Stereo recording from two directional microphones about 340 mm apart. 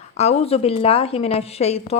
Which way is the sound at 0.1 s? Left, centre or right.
Centre.